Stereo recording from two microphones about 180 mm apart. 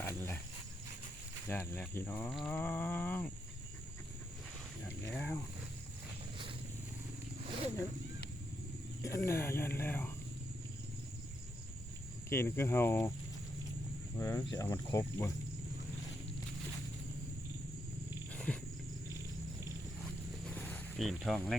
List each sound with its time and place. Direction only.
0.0 s a sound: 15° left (ahead or behind)
1.5 s speech: 10° left (ahead or behind)
4.9 s speech: 10° left (ahead or behind)
9.0 s speech: 15° left (ahead or behind)
12.3 s speech: 15° left (ahead or behind)
14.2 s speech: 15° left (ahead or behind)
18.3 s wild animals: 5° left (ahead or behind)
20.5 s a sound: 10° left (ahead or behind)